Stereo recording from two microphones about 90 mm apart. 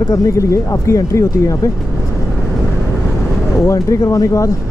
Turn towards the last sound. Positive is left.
turn(degrees=35)  # may be behind; listen again after turning